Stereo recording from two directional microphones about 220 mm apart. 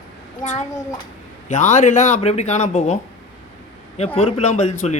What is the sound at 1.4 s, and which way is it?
Speech, 35° left (ahead or behind).